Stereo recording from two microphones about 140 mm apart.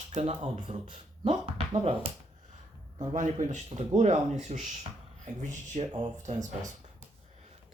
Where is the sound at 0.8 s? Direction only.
40° right (ahead or behind).